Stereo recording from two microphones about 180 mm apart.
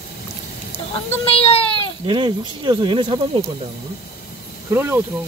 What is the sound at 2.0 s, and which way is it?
Speech, 25° right (ahead or behind).